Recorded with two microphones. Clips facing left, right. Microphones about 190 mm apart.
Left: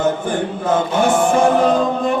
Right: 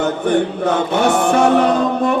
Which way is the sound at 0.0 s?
65° right (ahead or behind).